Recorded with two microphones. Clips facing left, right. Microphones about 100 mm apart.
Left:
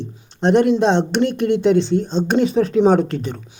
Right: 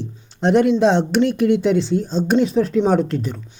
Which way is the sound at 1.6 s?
Centre (ahead or behind).